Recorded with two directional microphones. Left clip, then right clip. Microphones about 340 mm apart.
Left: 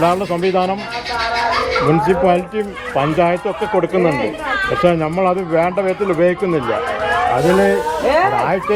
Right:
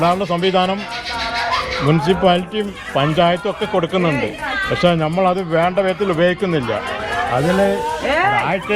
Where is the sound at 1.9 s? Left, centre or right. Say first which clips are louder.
Even; right.